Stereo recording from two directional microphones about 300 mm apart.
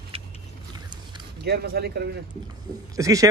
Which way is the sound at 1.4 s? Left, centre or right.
Right.